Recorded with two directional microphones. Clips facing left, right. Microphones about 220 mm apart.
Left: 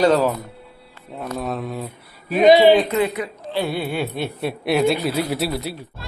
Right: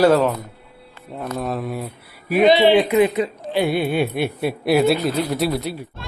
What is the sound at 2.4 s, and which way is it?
Speech, 10° left (ahead or behind).